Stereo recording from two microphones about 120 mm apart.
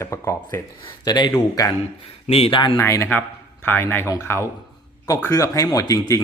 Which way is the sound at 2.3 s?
55° left (ahead or behind).